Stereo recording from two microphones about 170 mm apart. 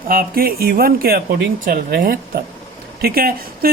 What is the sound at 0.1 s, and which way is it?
Speech, 60° right (ahead or behind).